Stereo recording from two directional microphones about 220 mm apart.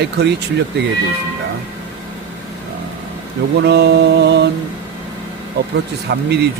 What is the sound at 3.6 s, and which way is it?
Mantra, 50° right (ahead or behind).